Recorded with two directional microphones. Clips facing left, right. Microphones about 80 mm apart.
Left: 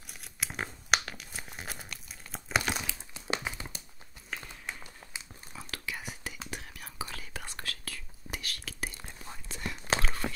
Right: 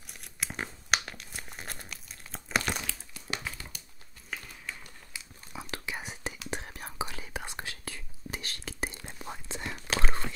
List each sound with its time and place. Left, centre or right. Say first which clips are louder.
0.1 s crumpling: even; centre
2.9 s crumpling: left 3 dB; left
4.4 s a sound: left 1 dB; left
5.5 s whispering: right 2 dB; centre
7.1 s whispering: right 3 dB; centre